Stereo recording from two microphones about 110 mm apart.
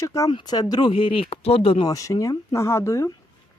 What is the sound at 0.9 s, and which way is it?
Speech, 55° left (ahead or behind).